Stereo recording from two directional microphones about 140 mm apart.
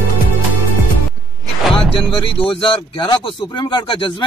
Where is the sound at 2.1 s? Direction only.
40° left (ahead or behind).